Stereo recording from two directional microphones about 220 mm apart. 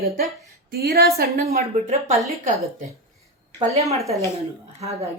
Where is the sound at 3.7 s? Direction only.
30° right (ahead or behind).